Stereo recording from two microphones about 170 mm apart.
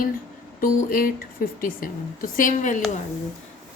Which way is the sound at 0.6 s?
55° left (ahead or behind).